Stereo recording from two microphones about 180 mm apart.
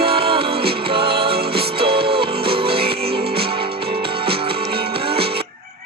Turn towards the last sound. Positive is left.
turn(degrees=-30)  # may be behind; listen again after turning